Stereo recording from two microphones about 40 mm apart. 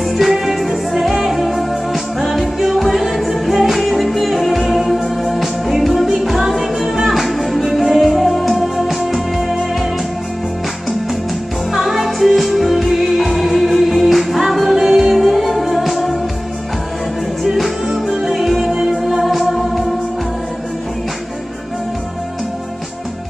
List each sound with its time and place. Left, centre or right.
0.0 s music: centre
11.7 s music: centre
17.4 s music: centre